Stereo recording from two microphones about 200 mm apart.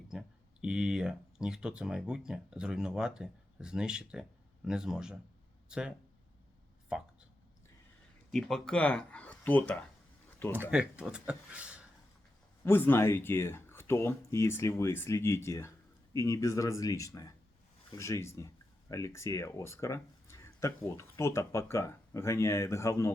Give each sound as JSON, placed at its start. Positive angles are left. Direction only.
{"t": 0.1, "sound": "speech", "side_deg": -5}
{"t": 6.9, "sound": "speech", "side_deg": 0}
{"t": 8.3, "sound": "speech", "side_deg": 0}
{"t": 10.5, "sound": "speech", "side_deg": -10}
{"t": 12.6, "sound": "speech", "side_deg": 10}